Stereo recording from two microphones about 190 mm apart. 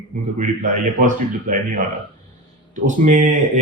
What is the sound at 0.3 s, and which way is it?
Speech, 45° right (ahead or behind).